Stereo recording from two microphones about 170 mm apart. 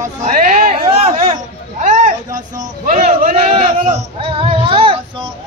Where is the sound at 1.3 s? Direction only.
45° right (ahead or behind).